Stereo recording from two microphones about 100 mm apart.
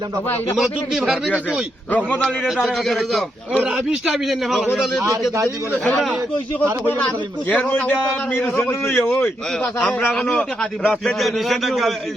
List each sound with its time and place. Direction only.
0.5 s a man's voice: 5° right (ahead or behind)
2.0 s a man's voice: 10° left (ahead or behind)
3.6 s a man's voice: 10° right (ahead or behind)
7.5 s a man's voice: 15° left (ahead or behind)
9.0 s a man's voice: 15° left (ahead or behind)
10.1 s a man's voice: 5° left (ahead or behind)